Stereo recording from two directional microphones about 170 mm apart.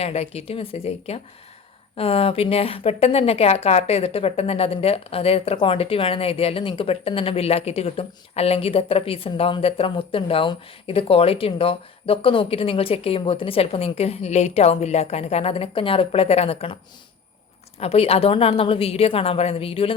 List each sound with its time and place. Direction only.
0.0 s a woman's voice: 40° left (ahead or behind)
17.7 s a woman's voice: 35° left (ahead or behind)